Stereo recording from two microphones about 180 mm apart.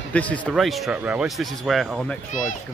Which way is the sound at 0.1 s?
10° left (ahead or behind).